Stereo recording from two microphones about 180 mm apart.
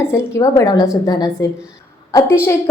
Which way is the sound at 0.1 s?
15° left (ahead or behind).